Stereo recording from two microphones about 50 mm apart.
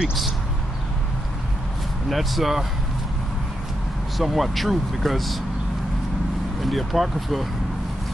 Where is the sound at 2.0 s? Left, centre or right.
Centre.